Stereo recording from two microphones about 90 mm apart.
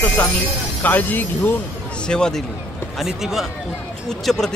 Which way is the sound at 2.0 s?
10° left (ahead or behind).